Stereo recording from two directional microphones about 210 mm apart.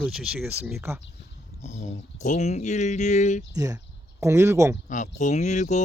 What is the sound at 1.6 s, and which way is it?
Speech, 35° left (ahead or behind).